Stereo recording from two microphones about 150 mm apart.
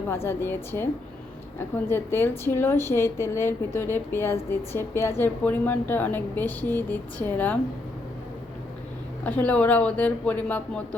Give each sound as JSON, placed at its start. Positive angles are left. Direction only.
{"t": 0.1, "sound": "a woman's voice", "side_deg": 15}
{"t": 9.2, "sound": "a woman's voice", "side_deg": 10}